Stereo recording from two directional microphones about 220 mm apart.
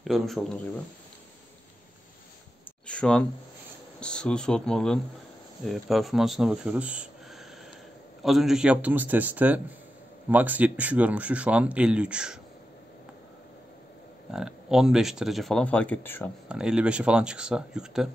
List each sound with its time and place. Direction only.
0.0 s speech: centre (ahead or behind)
2.9 s speech: 5° left (ahead or behind)
14.3 s speech: centre (ahead or behind)
16.4 s speech: 5° right (ahead or behind)